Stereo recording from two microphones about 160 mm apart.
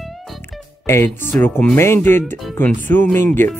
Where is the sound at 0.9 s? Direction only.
15° left (ahead or behind).